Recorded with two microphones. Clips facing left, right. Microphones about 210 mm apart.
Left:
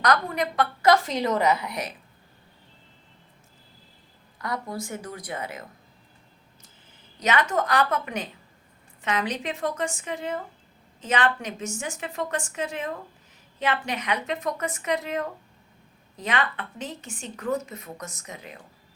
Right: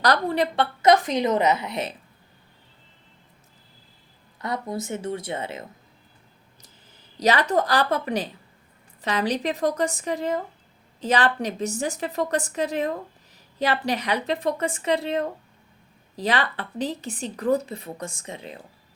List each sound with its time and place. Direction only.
0.0 s a woman's voice: 30° right (ahead or behind)
4.4 s a woman's voice: 25° right (ahead or behind)
7.2 s a woman's voice: 35° right (ahead or behind)